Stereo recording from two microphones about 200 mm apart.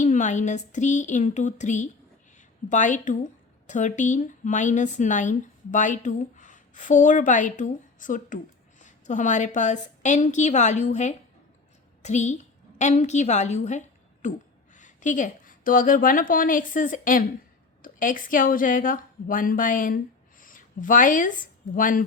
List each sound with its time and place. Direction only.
0.0 s a woman's voice: 40° left (ahead or behind)
20.4 s a sound: 40° left (ahead or behind)
21.8 s a woman's voice: 45° left (ahead or behind)